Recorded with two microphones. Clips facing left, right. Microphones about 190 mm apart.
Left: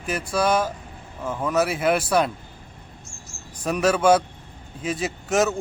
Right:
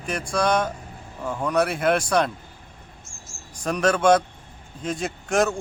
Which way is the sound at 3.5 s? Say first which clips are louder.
Left 1 dB; 5° left (ahead or behind).